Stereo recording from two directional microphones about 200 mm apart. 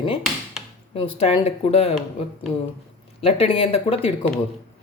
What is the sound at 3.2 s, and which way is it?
Speech, 30° left (ahead or behind).